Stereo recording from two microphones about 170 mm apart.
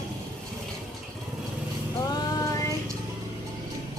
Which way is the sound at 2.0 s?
20° left (ahead or behind).